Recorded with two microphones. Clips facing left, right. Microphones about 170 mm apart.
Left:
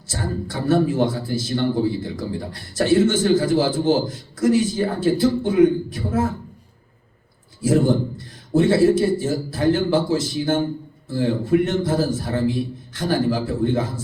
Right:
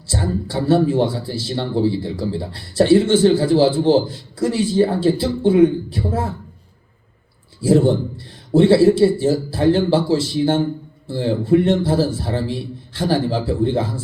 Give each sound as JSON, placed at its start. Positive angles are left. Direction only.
{"t": 0.1, "sound": "a man's voice", "side_deg": -30}
{"t": 7.6, "sound": "a man's voice", "side_deg": -30}